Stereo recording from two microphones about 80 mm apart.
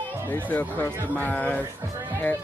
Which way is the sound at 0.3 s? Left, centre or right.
Left.